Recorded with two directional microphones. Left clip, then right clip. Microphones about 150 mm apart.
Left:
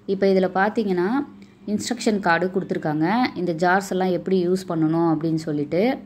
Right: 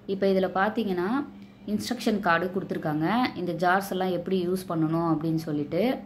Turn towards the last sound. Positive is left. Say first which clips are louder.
# left 5 dB
turn(degrees=35)  # may be behind; listen again after turning